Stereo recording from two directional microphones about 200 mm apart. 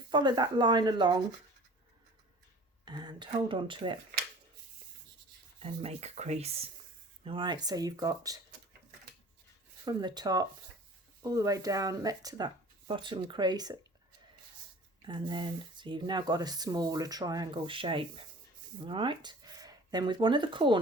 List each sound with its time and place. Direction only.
0.1 s speech: 20° right (ahead or behind)
2.8 s speech: 20° right (ahead or behind)
5.5 s speech: 30° right (ahead or behind)
9.8 s speech: 20° right (ahead or behind)
15.0 s speech: 25° right (ahead or behind)